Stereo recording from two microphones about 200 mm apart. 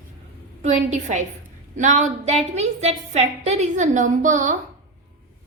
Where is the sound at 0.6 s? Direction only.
35° right (ahead or behind).